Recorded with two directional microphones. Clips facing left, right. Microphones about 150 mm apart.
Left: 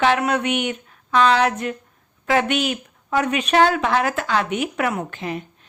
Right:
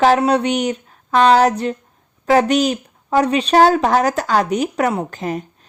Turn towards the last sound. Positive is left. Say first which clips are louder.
# right 4 dB
turn(degrees=-40)  # may be behind; listen again after turning